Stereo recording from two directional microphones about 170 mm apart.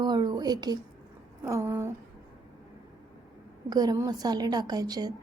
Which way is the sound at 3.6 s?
20° right (ahead or behind).